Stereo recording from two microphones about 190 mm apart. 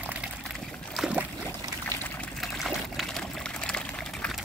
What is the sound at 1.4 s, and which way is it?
Pour, 10° left (ahead or behind).